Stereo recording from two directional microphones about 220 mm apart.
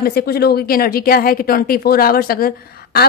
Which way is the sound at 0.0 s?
45° left (ahead or behind).